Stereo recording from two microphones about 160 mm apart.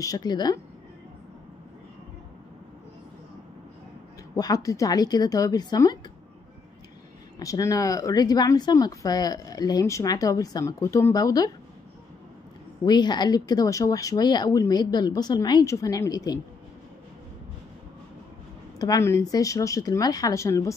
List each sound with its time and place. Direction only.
0.0 s speech: 25° left (ahead or behind)
4.4 s speech: 20° left (ahead or behind)
7.3 s speech: 20° left (ahead or behind)
12.8 s speech: 25° left (ahead or behind)
18.8 s speech: 20° left (ahead or behind)